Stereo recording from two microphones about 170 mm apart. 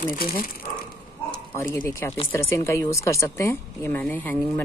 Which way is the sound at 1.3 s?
10° left (ahead or behind).